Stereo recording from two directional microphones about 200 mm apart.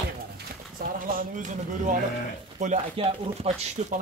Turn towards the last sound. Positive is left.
turn(degrees=-35)  # may be behind; listen again after turning